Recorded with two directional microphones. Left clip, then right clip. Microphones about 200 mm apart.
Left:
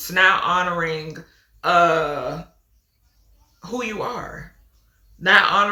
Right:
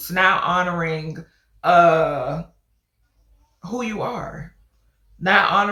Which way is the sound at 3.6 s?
10° left (ahead or behind).